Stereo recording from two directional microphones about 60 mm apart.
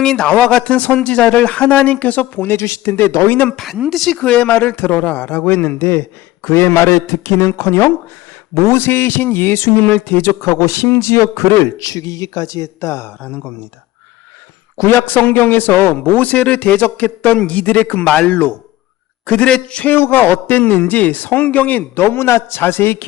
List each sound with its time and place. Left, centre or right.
0.0 s speech: centre; by 2.6 s left
2.6 s a man's voice: left
3.5 s speech: centre
4.1 s a man's voice: centre; by 12.6 s left
12.8 s a man's voice: left
13.1 s speech: left
14.8 s a man's voice: left; by 19.8 s centre
19.8 s a man's voice: left